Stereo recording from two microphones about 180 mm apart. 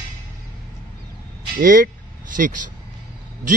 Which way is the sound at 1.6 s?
50° right (ahead or behind).